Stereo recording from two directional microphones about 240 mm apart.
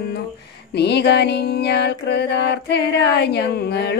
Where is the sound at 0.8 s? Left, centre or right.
Left.